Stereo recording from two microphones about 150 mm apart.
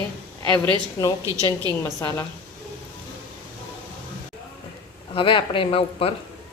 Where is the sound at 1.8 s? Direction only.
20° left (ahead or behind).